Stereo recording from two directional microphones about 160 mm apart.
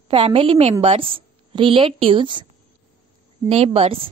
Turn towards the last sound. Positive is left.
turn(degrees=-35)  # may be behind; listen again after turning